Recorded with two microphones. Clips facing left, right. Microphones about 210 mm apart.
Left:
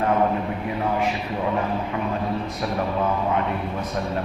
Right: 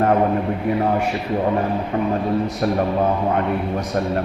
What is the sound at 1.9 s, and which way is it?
A man's voice, 40° right (ahead or behind).